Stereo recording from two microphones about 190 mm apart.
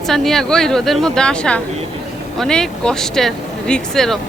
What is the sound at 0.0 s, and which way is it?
Speech, centre (ahead or behind).